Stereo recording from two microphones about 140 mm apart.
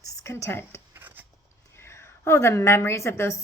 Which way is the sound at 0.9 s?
15° right (ahead or behind).